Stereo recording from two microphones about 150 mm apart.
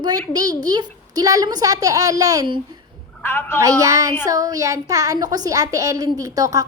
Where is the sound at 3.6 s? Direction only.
20° right (ahead or behind).